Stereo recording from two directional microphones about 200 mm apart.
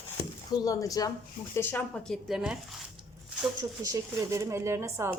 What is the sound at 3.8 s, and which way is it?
Speech, 15° right (ahead or behind).